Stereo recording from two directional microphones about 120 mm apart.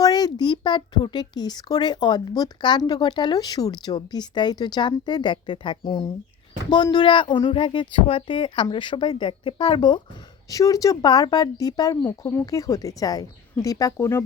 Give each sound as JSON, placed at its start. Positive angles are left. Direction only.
{"t": 0.0, "sound": "speech", "side_deg": 35}
{"t": 10.5, "sound": "speech", "side_deg": 30}